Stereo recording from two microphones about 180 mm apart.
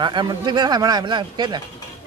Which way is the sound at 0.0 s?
25° right (ahead or behind).